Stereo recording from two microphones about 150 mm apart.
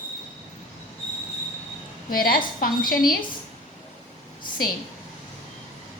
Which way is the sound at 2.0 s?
75° left (ahead or behind).